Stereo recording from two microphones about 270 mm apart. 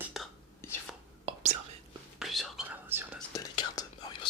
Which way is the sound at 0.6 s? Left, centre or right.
Centre.